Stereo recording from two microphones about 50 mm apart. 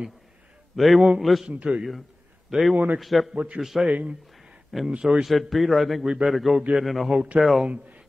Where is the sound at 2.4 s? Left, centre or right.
Centre.